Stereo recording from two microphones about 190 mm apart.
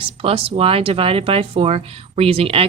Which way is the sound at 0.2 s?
30° right (ahead or behind).